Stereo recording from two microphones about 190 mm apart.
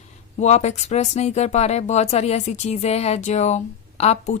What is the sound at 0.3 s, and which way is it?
Speech, 35° left (ahead or behind).